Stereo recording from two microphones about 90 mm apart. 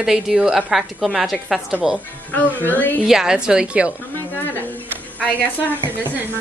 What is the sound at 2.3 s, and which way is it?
Speech, 20° left (ahead or behind).